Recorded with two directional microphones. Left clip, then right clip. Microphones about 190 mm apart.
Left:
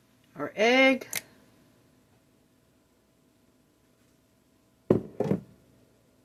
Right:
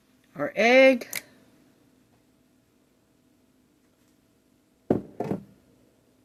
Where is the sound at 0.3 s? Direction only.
55° right (ahead or behind).